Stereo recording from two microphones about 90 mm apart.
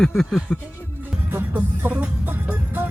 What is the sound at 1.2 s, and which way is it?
Music, 20° right (ahead or behind).